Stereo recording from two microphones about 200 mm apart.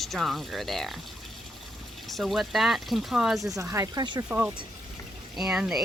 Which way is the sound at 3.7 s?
15° right (ahead or behind).